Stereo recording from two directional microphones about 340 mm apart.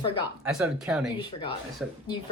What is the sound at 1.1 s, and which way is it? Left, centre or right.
Speech, centre.